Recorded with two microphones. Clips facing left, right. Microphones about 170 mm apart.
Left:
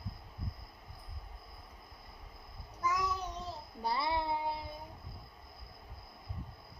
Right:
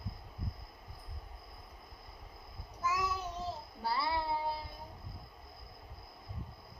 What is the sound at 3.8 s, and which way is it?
Child singing, 20° left (ahead or behind).